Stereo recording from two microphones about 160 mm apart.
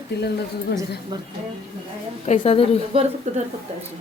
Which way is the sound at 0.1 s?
90° left.